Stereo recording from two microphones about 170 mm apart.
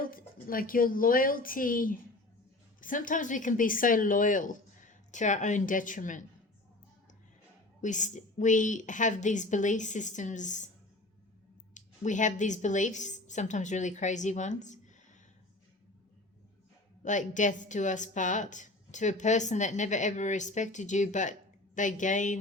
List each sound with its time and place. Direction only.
0.0 s a woman's voice: 55° left (ahead or behind)
7.8 s a woman's voice: 45° left (ahead or behind)
11.7 s a woman's voice: 45° left (ahead or behind)
17.0 s a woman's voice: 45° left (ahead or behind)